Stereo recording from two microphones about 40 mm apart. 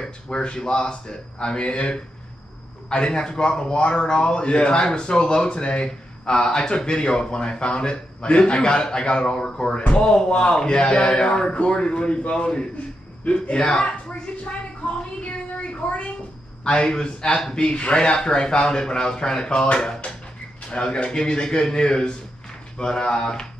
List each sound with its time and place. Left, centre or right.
0.3 s speech: left